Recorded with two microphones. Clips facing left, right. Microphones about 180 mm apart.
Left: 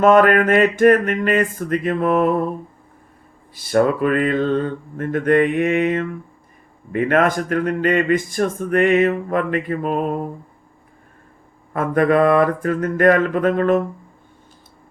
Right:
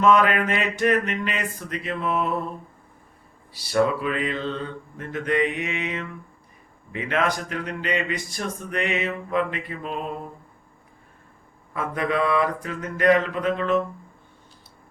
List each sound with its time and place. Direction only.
0.0 s speech: 50° left (ahead or behind)
3.5 s speech: 50° left (ahead or behind)
11.7 s speech: 50° left (ahead or behind)